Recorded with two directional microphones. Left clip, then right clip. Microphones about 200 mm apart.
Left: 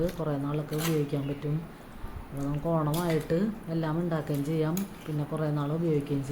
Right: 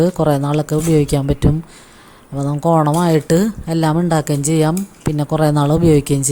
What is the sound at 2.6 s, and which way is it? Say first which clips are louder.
A woman's voice: right 16 dB; 55° right (ahead or behind).